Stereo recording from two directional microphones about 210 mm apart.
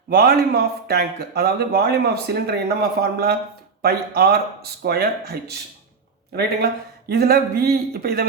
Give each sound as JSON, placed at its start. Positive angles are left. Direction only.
{"t": 0.1, "sound": "speech", "side_deg": -45}
{"t": 7.1, "sound": "speech", "side_deg": -45}